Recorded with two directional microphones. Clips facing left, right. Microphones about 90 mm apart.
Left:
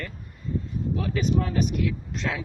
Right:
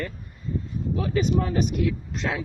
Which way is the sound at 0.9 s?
10° right (ahead or behind).